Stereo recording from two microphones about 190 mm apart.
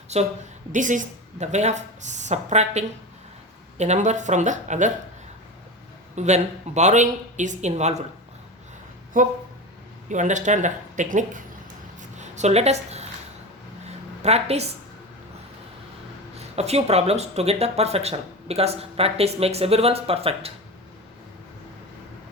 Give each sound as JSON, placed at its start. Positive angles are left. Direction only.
{"t": 0.1, "sound": "speech", "side_deg": -35}
{"t": 6.1, "sound": "speech", "side_deg": -35}
{"t": 9.2, "sound": "speech", "side_deg": -45}
{"t": 11.9, "sound": "a sound", "side_deg": -40}
{"t": 16.6, "sound": "speech", "side_deg": -35}